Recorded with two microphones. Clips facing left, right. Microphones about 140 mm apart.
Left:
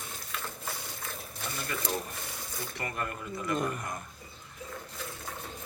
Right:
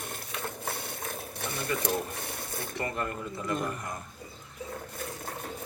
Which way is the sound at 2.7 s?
25° right (ahead or behind).